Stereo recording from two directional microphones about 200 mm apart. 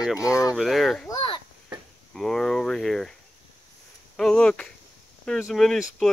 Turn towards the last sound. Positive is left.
turn(degrees=0)  # may be behind; listen again after turning